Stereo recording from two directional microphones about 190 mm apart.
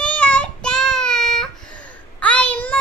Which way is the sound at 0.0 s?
5° left (ahead or behind).